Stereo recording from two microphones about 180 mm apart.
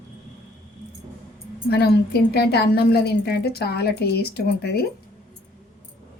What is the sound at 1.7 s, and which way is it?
A woman's voice, 60° left (ahead or behind).